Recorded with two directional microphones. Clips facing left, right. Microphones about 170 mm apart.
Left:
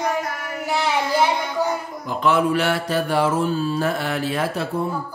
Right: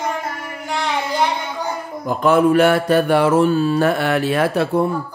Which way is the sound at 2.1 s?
50° right (ahead or behind).